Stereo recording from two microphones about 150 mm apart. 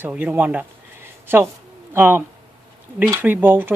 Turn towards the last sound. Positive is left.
turn(degrees=-15)  # may be behind; listen again after turning